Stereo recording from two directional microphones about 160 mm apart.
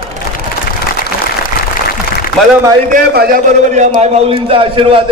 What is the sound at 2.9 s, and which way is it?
A man's voice, 60° right (ahead or behind).